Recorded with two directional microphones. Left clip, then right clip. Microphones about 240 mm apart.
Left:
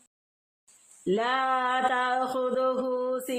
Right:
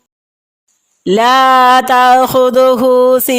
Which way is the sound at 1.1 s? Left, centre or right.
Right.